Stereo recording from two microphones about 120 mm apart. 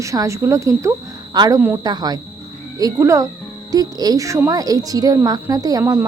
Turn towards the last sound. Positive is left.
turn(degrees=-20)  # may be behind; listen again after turning